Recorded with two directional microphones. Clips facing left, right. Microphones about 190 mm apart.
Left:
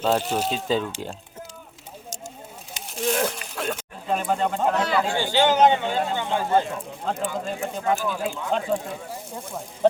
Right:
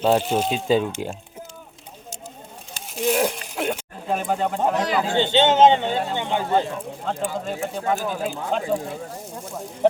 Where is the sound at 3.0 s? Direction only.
10° right (ahead or behind).